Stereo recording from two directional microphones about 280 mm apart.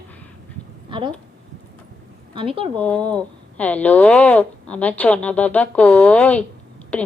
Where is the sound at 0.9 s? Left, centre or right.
Centre.